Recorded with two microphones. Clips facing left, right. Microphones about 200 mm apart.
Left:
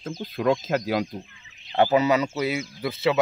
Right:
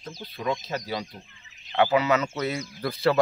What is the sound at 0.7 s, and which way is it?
Speech, 75° left (ahead or behind).